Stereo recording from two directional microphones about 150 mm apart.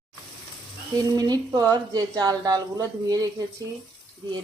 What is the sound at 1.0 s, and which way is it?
Speech, 25° right (ahead or behind).